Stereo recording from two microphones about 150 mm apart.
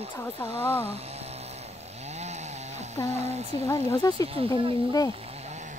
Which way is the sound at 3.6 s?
20° left (ahead or behind).